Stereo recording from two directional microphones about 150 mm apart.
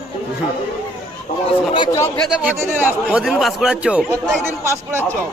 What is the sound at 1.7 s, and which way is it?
Speech, 30° left (ahead or behind).